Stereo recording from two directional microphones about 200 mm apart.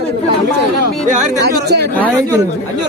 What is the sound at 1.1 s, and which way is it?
Speech, 50° right (ahead or behind).